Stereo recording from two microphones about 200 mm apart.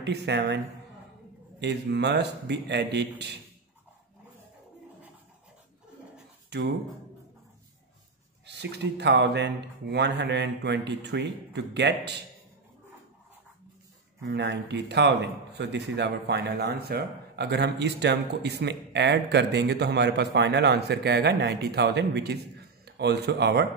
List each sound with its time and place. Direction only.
0.0 s a man's voice: 60° right (ahead or behind)
1.6 s a man's voice: 60° right (ahead or behind)
8.5 s a man's voice: 60° right (ahead or behind)
14.2 s a man's voice: 60° right (ahead or behind)